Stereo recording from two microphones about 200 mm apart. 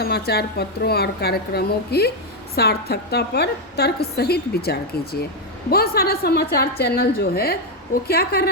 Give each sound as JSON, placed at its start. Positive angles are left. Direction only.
{"t": 0.0, "sound": "a woman's voice", "side_deg": 50}